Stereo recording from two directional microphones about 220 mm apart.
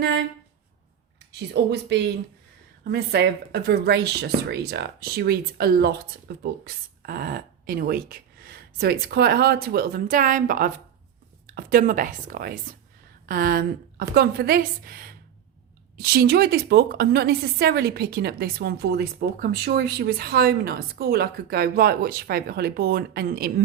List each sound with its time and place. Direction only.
0.0 s a woman's voice: 50° right (ahead or behind)
1.3 s a woman's voice: 50° right (ahead or behind)